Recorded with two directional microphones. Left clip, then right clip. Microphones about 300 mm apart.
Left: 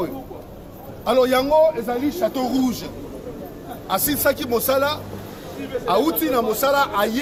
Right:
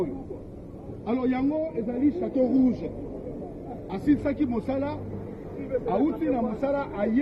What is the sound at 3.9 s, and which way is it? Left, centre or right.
A man's voice, left.